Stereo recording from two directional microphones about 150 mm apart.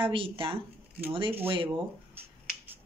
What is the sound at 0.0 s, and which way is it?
Speech, 35° right (ahead or behind).